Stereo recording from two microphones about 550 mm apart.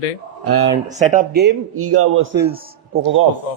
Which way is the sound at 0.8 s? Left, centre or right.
Centre.